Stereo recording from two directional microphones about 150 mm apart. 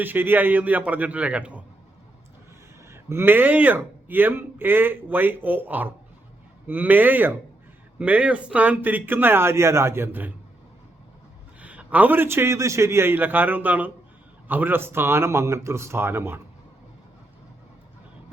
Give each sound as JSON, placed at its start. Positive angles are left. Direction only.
{"t": 0.0, "sound": "a man's voice", "side_deg": -15}
{"t": 2.9, "sound": "a man's voice", "side_deg": -15}
{"t": 11.6, "sound": "a man's voice", "side_deg": -10}